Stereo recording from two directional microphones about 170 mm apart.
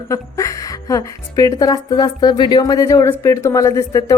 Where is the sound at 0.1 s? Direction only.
20° left (ahead or behind).